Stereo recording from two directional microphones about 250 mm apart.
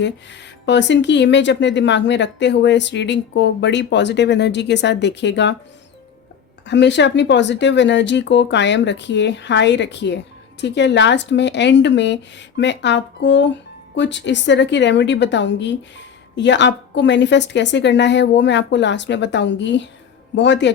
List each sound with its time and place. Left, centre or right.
0.0 s speech: left
6.7 s speech: left